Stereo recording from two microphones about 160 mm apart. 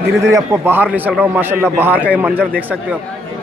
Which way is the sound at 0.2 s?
20° right (ahead or behind).